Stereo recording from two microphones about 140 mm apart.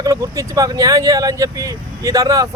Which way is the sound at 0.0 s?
25° right (ahead or behind).